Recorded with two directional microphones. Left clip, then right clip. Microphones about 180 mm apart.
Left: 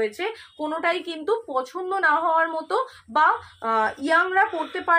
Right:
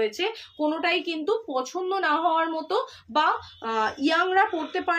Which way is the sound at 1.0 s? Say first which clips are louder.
Left 1 dB; 20° right (ahead or behind).